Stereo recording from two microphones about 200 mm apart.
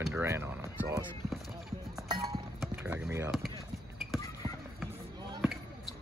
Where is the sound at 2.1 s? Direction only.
20° right (ahead or behind).